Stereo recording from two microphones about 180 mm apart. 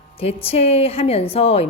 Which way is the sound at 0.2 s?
35° left (ahead or behind).